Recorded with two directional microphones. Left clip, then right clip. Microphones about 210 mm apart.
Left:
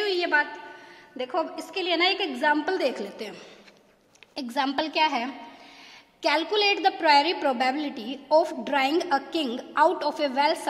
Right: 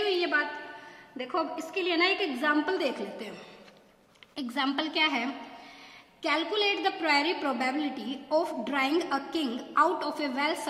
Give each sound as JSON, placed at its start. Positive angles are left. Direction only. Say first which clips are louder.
{"t": 0.0, "sound": "a sound", "louder": "left 3 dB", "side_deg": 45}
{"t": 1.7, "sound": "a woman's voice", "louder": "left 3 dB", "side_deg": 40}
{"t": 6.2, "sound": "a woman's voice", "louder": "left 5 dB", "side_deg": 45}